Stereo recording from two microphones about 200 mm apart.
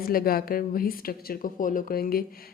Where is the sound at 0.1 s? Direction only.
45° left (ahead or behind).